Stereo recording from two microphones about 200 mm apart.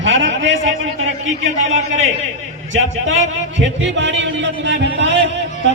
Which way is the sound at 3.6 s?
65° right (ahead or behind).